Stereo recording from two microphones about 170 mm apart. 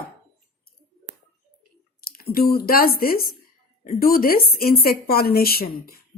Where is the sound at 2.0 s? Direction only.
60° left (ahead or behind).